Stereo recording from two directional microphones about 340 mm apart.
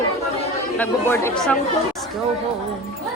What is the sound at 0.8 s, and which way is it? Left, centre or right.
Music, centre.